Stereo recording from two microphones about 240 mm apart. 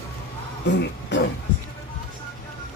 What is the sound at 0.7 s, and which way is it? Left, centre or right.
Speech, left.